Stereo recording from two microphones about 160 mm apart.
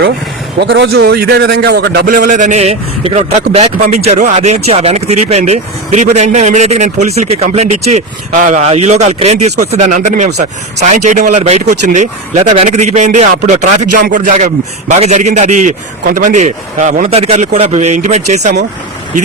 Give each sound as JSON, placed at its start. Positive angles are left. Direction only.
{"t": 0.6, "sound": "a man's voice", "side_deg": -85}